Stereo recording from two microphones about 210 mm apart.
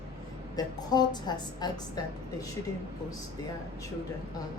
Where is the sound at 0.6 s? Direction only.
20° left (ahead or behind).